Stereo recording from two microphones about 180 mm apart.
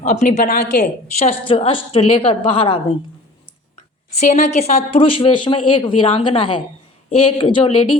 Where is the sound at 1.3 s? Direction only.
30° left (ahead or behind).